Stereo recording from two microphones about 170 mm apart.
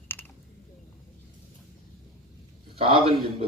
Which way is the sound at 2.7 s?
35° right (ahead or behind).